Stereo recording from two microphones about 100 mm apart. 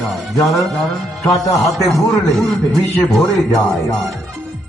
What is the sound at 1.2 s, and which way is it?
Speech, centre (ahead or behind).